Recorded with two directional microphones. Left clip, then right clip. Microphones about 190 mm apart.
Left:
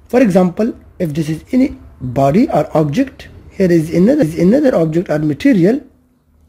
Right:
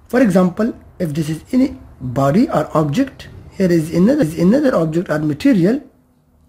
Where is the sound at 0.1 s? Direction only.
15° left (ahead or behind).